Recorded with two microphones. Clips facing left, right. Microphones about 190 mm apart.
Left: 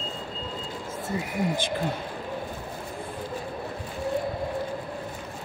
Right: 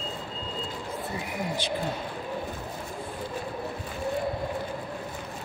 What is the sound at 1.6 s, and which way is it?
Speech, 50° left (ahead or behind).